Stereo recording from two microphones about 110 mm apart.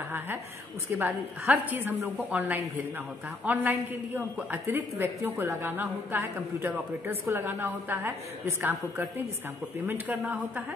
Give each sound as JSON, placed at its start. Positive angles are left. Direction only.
{"t": 0.9, "sound": "a woman's voice", "side_deg": -20}